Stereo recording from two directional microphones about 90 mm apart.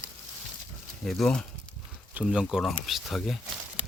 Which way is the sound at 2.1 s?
10° right (ahead or behind).